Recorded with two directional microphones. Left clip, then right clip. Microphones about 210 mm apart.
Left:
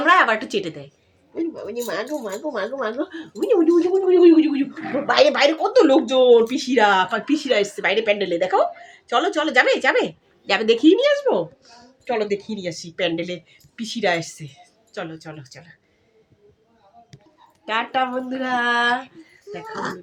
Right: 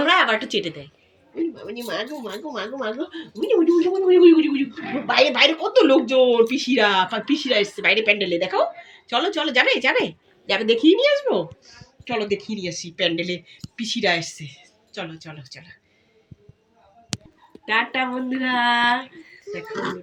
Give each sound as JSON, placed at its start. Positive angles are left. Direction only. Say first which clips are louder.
{"t": 0.0, "sound": "a sound", "louder": "left 2 dB", "side_deg": 35}
{"t": 2.5, "sound": "speech", "louder": "left 3 dB", "side_deg": 30}
{"t": 17.7, "sound": "speech", "louder": "even", "side_deg": 20}